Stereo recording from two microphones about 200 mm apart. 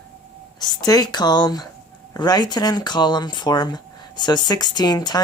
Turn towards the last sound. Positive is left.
turn(degrees=20)  # may be behind; listen again after turning